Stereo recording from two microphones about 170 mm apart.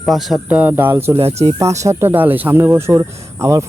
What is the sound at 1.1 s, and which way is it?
Speech, 35° right (ahead or behind).